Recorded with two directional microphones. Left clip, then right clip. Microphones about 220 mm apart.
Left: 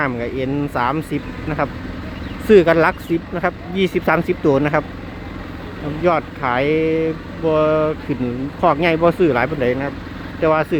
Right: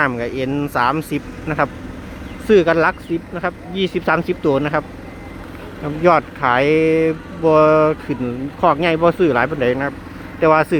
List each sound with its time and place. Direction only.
0.0 s speech: 10° right (ahead or behind)
2.5 s speech: centre (ahead or behind)
6.0 s speech: 15° right (ahead or behind)
8.6 s speech: 5° right (ahead or behind)